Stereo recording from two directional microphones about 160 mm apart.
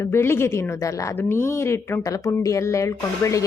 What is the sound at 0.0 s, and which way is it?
A woman's voice, 15° left (ahead or behind).